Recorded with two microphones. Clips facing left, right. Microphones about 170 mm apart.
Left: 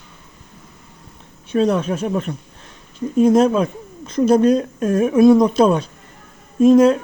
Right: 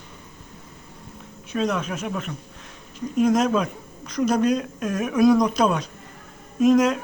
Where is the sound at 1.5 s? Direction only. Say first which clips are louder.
Left 7 dB; 30° left (ahead or behind).